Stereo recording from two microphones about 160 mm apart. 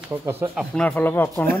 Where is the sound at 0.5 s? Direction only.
5° left (ahead or behind).